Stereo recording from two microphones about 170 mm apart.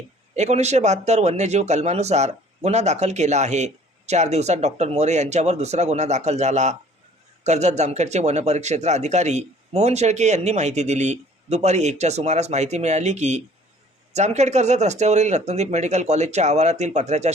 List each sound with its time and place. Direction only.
0.3 s speech: 40° right (ahead or behind)